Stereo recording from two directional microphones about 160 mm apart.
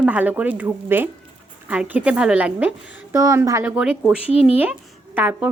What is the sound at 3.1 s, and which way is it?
Speech, 20° right (ahead or behind).